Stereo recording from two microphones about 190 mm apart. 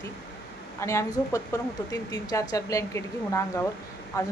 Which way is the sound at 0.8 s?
15° left (ahead or behind).